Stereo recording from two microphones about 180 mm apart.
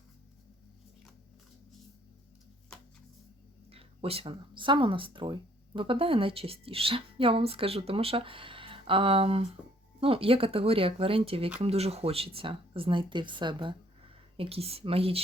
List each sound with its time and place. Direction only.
3.7 s speech: 30° right (ahead or behind)